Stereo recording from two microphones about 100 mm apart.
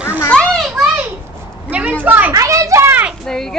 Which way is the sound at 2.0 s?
15° right (ahead or behind).